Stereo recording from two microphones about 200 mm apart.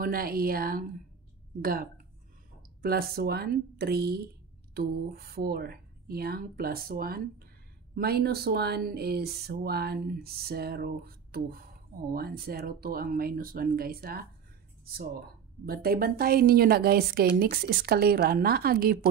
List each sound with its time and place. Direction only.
0.0 s a woman's voice: 45° right (ahead or behind)